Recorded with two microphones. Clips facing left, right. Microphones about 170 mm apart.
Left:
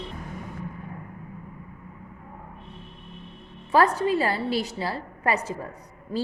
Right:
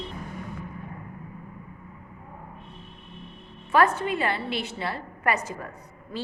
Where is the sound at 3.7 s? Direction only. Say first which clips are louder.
Left 2 dB; 35° left (ahead or behind).